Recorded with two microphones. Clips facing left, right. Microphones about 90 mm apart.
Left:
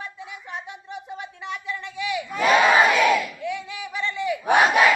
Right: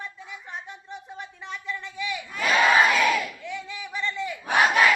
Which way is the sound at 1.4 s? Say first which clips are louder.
Left 6 dB; 65° left (ahead or behind).